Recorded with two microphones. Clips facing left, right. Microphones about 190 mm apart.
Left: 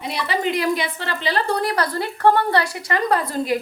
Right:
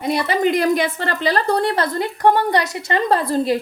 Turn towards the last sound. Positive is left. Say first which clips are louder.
# right 3 dB
turn(degrees=-30)  # may be behind; listen again after turning